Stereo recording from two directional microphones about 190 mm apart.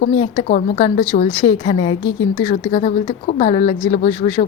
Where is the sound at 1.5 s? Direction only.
30° left (ahead or behind).